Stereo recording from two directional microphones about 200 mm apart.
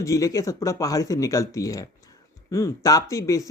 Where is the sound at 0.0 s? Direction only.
15° left (ahead or behind).